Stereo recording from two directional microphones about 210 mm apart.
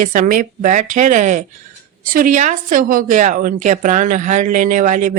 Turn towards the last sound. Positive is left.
turn(degrees=-35)  # may be behind; listen again after turning